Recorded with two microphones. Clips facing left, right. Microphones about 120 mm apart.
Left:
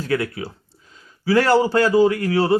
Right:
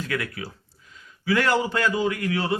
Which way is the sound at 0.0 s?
30° left (ahead or behind).